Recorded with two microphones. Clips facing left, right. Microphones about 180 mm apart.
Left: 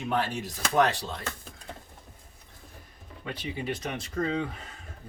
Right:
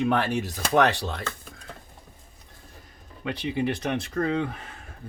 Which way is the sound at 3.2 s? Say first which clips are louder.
Right 7 dB; 70° right (ahead or behind).